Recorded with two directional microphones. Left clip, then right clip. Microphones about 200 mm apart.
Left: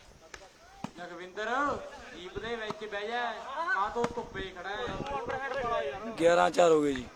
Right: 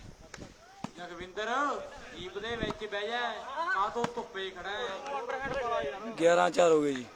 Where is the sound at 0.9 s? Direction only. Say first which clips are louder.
Right 1 dB; 40° right (ahead or behind).